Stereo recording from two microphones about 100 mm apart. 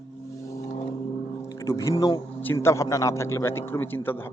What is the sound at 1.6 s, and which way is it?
A man's voice, 35° left (ahead or behind).